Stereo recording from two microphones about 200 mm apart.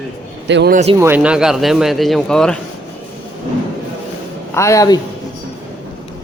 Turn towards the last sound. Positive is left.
turn(degrees=15)  # may be behind; listen again after turning